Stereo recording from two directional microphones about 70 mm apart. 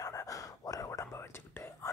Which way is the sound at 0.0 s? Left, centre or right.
Left.